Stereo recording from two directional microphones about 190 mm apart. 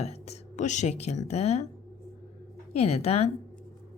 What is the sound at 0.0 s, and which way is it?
Speech, 35° left (ahead or behind).